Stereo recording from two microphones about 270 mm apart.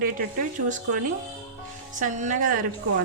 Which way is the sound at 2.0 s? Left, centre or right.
Right.